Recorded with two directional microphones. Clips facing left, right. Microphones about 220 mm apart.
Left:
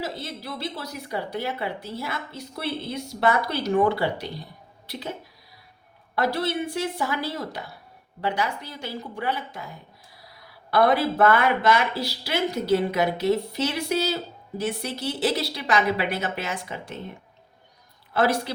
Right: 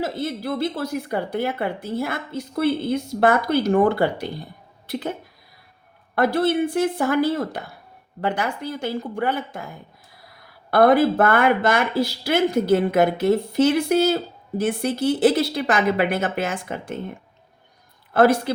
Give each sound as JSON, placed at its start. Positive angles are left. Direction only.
{"t": 0.0, "sound": "speech", "side_deg": -50}
{"t": 6.1, "sound": "speech", "side_deg": -50}
{"t": 18.1, "sound": "speech", "side_deg": -50}